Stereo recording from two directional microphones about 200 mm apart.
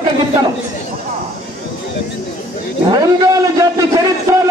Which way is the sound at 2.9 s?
20° right (ahead or behind).